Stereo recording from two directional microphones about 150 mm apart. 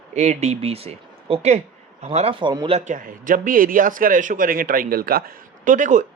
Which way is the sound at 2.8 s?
60° right (ahead or behind).